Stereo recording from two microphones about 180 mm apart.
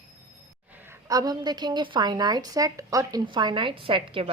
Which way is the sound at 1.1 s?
20° right (ahead or behind).